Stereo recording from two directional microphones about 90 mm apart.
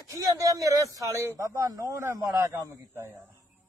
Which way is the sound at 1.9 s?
30° right (ahead or behind).